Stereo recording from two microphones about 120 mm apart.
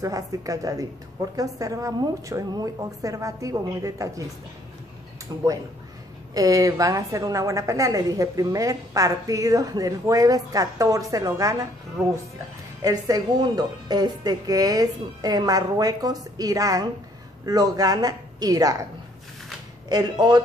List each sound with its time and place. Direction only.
0.0 s a woman's voice: 30° right (ahead or behind)
5.3 s a woman's voice: 35° right (ahead or behind)
19.9 s a woman's voice: 35° right (ahead or behind)